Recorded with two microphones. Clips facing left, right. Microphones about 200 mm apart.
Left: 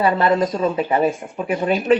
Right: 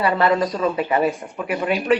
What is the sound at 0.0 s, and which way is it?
A woman's voice, 25° left (ahead or behind).